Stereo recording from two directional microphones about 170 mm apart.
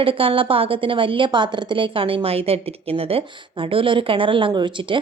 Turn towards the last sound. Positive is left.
turn(degrees=-30)  # may be behind; listen again after turning